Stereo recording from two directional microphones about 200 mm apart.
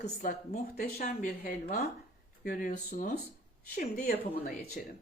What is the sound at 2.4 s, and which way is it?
Speech, 45° left (ahead or behind).